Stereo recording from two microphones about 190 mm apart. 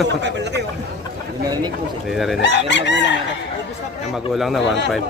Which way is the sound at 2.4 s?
70° left (ahead or behind).